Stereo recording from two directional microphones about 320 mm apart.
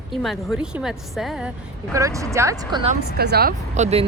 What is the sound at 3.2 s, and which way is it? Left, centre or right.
Speech, right.